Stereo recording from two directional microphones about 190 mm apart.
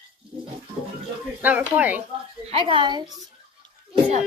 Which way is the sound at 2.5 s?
25° right (ahead or behind).